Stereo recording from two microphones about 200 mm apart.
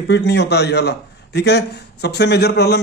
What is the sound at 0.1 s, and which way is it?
A man's voice, 55° left (ahead or behind).